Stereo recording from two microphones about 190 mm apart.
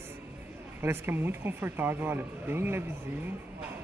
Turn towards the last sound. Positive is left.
turn(degrees=-10)  # may be behind; listen again after turning